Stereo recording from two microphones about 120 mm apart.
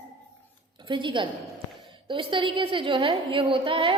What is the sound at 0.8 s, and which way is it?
A woman's voice, 45° right (ahead or behind).